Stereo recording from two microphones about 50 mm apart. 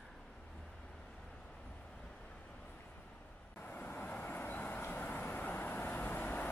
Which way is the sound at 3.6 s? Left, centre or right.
Left.